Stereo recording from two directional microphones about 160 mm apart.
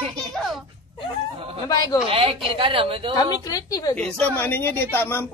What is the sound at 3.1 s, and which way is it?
Speech, 25° left (ahead or behind).